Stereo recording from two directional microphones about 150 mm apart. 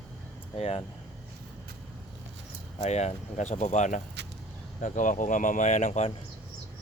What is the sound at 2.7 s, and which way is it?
Speech, 45° left (ahead or behind).